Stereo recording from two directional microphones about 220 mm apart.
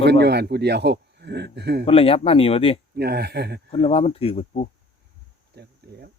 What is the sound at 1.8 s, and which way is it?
Speech, 25° left (ahead or behind).